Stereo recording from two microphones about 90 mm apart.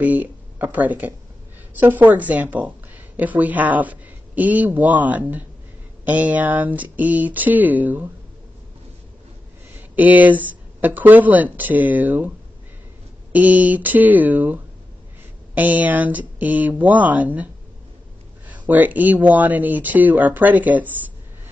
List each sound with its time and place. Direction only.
0.0 s speech: 20° right (ahead or behind)
9.8 s speech: 20° right (ahead or behind)
13.3 s speech: 15° right (ahead or behind)
18.5 s speech: 20° right (ahead or behind)